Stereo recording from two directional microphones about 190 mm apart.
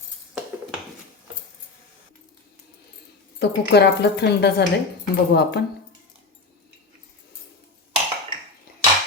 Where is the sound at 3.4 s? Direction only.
60° left (ahead or behind).